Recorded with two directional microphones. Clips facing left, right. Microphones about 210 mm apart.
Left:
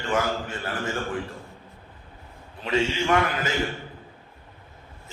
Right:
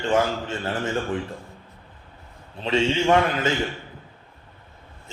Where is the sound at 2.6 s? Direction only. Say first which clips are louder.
Right 3 dB; 25° right (ahead or behind).